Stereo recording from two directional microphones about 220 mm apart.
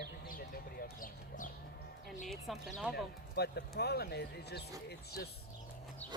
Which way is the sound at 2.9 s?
45° left (ahead or behind).